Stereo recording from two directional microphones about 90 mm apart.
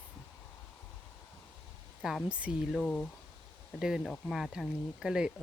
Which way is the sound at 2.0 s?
10° right (ahead or behind).